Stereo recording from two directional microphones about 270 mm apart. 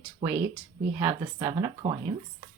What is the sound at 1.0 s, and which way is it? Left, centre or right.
Speech, centre.